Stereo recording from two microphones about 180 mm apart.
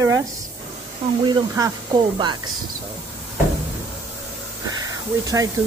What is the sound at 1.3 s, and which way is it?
Speech, 20° right (ahead or behind).